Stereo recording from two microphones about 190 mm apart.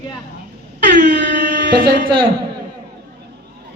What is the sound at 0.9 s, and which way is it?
Air horn, 65° right (ahead or behind).